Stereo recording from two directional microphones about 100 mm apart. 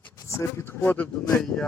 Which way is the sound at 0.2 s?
30° left (ahead or behind).